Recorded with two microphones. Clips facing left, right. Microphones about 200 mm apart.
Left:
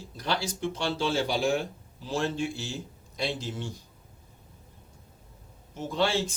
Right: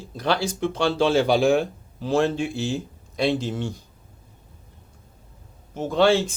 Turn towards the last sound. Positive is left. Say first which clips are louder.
# right 8 dB
turn(degrees=-70)  # may be behind; listen again after turning